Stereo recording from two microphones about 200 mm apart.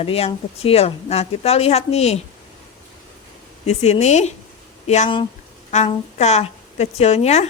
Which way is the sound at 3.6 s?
35° left (ahead or behind).